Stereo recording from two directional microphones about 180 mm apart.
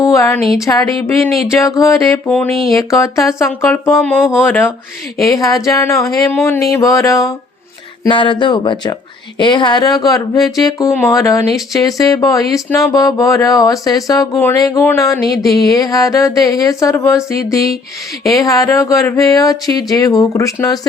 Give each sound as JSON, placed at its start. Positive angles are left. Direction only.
{"t": 0.0, "sound": "a sound", "side_deg": 15}
{"t": 0.6, "sound": "speech", "side_deg": 20}
{"t": 1.2, "sound": "a sound", "side_deg": 0}
{"t": 1.6, "sound": "speech", "side_deg": 15}
{"t": 2.2, "sound": "speech", "side_deg": 5}
{"t": 2.7, "sound": "speech", "side_deg": 15}
{"t": 18.3, "sound": "speech", "side_deg": 20}